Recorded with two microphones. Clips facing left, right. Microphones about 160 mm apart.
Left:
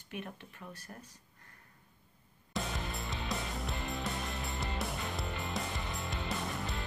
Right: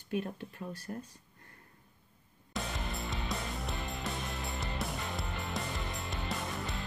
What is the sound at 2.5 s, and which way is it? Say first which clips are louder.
Music: even; centre (ahead or behind).